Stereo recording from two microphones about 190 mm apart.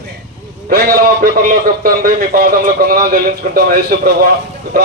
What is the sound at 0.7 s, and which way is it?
A man's voice, 50° right (ahead or behind).